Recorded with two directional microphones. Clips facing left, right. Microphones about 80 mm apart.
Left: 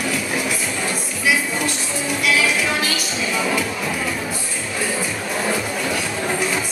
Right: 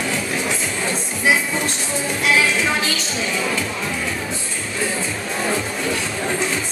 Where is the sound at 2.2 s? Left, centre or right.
Right.